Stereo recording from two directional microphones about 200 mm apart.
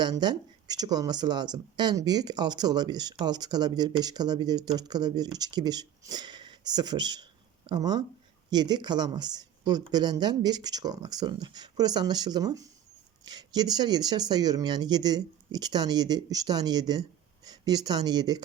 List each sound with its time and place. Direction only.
0.0 s speech: 20° right (ahead or behind)